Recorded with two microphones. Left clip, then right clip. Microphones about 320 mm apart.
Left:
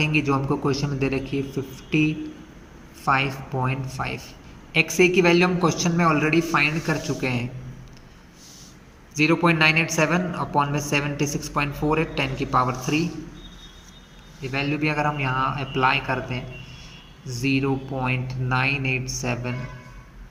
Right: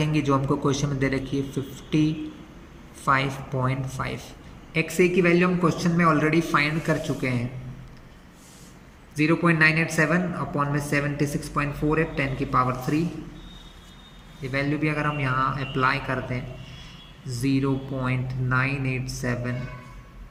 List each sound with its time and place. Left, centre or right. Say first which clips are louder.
0.0 s a man's voice: left 2 dB; centre
9.1 s speech: left 2 dB; centre
14.4 s speech: left 1 dB; centre